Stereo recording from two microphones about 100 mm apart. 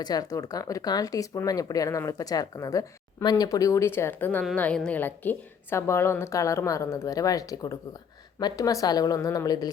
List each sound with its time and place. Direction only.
0.0 s a woman's voice: 40° left (ahead or behind)